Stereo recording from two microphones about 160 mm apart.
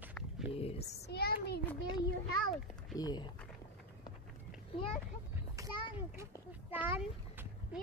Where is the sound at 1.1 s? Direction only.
80° left.